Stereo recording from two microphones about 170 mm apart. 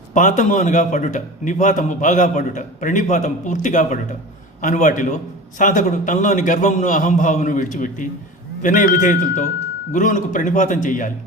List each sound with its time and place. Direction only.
0.1 s a man's voice: 50° left (ahead or behind)